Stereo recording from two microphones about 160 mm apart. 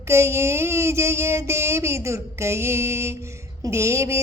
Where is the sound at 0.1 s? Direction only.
15° right (ahead or behind).